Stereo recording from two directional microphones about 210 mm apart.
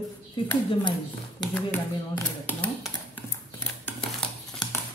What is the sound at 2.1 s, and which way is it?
Speech, 10° left (ahead or behind).